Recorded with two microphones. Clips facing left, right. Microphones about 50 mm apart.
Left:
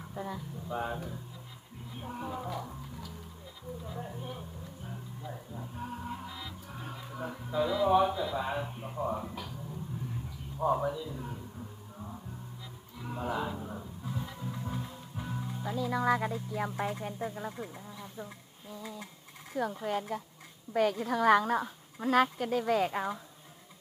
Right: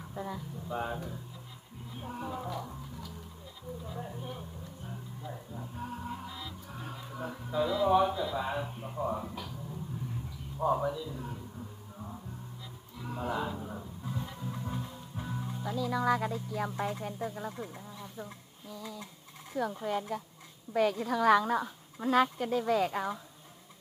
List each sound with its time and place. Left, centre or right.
0.0 s speech: centre
2.0 s music: centre
3.8 s speech: centre
11.9 s music: centre
15.7 s speech: centre
18.7 s a sound: left
19.5 s speech: centre